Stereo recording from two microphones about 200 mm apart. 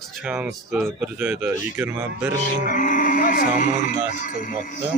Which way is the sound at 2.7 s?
40° left (ahead or behind).